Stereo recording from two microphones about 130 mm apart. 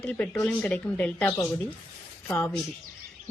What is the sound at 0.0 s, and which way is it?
A woman's voice, 10° left (ahead or behind).